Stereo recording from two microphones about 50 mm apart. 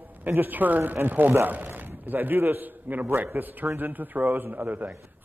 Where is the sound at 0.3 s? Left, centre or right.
Right.